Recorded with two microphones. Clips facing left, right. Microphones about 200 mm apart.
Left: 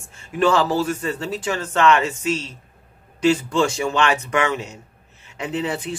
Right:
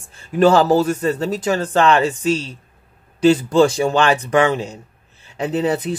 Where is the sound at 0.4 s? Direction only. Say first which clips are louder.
Right 5 dB; 40° right (ahead or behind).